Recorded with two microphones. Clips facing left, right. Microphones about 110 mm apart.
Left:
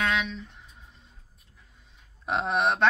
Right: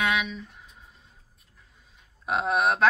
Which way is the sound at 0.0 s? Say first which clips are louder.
Right 1 dB; 10° right (ahead or behind).